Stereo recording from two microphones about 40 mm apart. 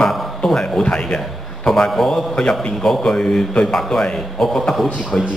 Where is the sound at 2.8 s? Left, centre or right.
Centre.